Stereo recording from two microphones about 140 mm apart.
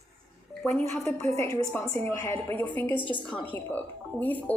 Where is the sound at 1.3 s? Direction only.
20° left (ahead or behind).